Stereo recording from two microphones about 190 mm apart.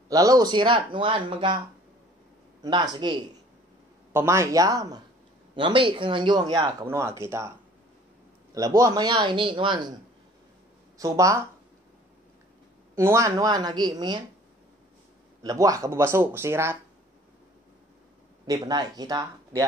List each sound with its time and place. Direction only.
0.1 s speech: 20° right (ahead or behind)
2.6 s speech: 20° right (ahead or behind)
8.5 s speech: 15° right (ahead or behind)
11.0 s speech: 15° right (ahead or behind)
12.9 s speech: 15° right (ahead or behind)
15.4 s speech: 20° right (ahead or behind)
18.5 s speech: 20° right (ahead or behind)